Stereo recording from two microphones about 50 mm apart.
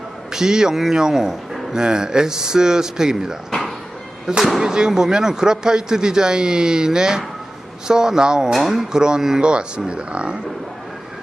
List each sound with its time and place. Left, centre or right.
0.3 s a man's voice: centre